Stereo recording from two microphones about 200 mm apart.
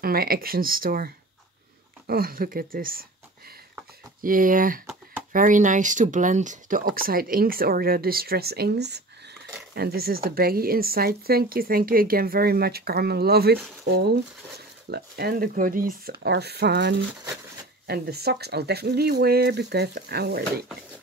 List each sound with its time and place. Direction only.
0.0 s speech: 50° right (ahead or behind)